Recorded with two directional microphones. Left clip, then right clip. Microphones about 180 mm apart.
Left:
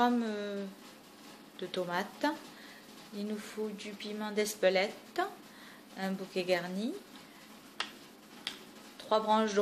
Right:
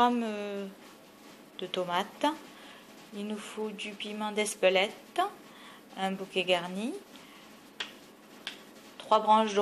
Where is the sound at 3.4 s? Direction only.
Centre (ahead or behind).